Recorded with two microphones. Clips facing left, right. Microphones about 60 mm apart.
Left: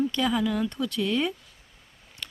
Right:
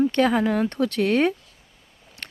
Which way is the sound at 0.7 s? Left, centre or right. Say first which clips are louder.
Right 6 dB; right.